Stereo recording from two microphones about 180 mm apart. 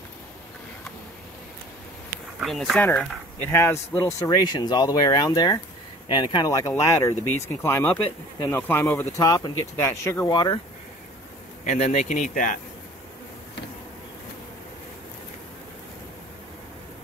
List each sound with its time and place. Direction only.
2.4 s speech: centre (ahead or behind)
3.4 s speech: 15° left (ahead or behind)
11.6 s speech: 40° left (ahead or behind)